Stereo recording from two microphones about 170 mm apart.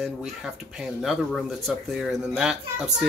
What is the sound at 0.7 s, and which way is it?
Speech, centre (ahead or behind).